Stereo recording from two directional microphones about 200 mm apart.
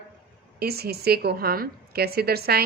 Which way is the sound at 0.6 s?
50° right (ahead or behind).